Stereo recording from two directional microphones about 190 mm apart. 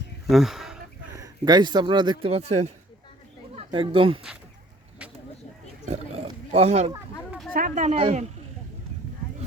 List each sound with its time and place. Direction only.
0.3 s speech: centre (ahead or behind)
1.1 s speech: 20° right (ahead or behind)
5.8 s wild animals: 35° right (ahead or behind)
6.5 s a woman's voice: 35° right (ahead or behind)
7.2 s a sound: centre (ahead or behind)
7.5 s a woman's voice: 45° right (ahead or behind)